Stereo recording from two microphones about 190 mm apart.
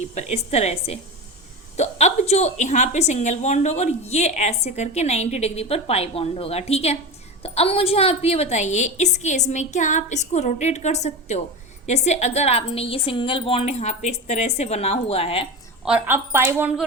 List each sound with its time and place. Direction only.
0.1 s a woman's voice: 35° left (ahead or behind)
15.8 s a woman's voice: 5° right (ahead or behind)